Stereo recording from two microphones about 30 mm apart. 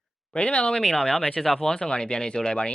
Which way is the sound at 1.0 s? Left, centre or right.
Left.